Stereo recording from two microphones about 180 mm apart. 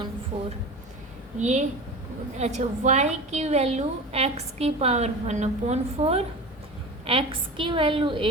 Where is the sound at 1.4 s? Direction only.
40° right (ahead or behind).